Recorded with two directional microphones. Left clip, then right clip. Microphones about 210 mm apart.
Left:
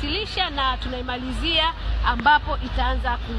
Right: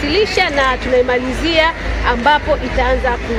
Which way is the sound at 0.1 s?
50° left (ahead or behind).